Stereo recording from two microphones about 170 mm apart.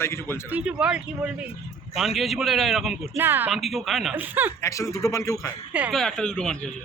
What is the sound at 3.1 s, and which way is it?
Speech, 10° right (ahead or behind).